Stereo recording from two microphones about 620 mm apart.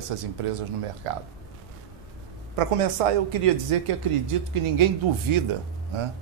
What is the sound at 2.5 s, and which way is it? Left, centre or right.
A woman's voice, right.